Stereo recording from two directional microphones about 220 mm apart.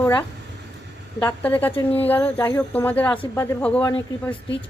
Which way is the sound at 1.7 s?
25° left (ahead or behind).